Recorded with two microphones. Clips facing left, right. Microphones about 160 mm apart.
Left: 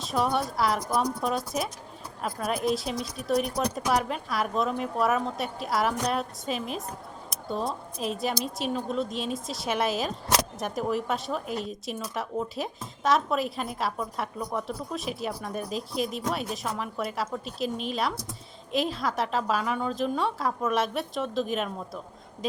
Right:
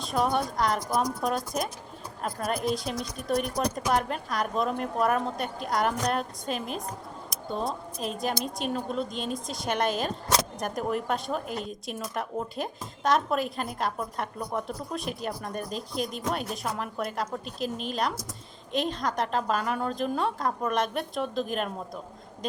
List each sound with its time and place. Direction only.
0.0 s a woman's voice: centre (ahead or behind)
18.1 s speech: 60° left (ahead or behind)
18.7 s a woman's voice: 5° left (ahead or behind)